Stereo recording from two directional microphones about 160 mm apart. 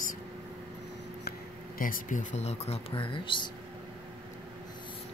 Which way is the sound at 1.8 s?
55° left (ahead or behind).